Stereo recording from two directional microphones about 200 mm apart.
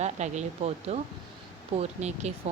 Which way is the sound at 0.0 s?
35° right (ahead or behind).